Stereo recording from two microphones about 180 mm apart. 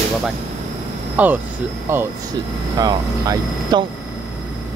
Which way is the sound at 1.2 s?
10° right (ahead or behind).